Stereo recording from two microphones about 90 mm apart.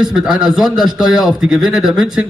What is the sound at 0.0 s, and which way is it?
A man's voice, 5° right (ahead or behind).